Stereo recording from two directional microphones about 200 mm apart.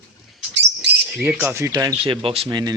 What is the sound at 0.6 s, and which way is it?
Bird, 60° right (ahead or behind).